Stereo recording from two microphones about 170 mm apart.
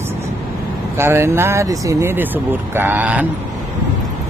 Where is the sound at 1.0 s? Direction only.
15° right (ahead or behind).